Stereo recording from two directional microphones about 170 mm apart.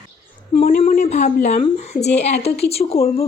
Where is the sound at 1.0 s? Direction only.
40° left (ahead or behind).